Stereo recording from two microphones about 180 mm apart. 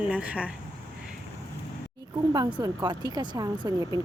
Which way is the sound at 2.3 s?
20° right (ahead or behind).